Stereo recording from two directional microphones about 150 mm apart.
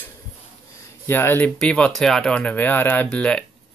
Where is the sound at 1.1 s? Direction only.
15° left (ahead or behind).